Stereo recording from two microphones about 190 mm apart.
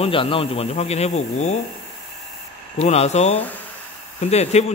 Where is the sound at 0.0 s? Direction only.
30° left (ahead or behind).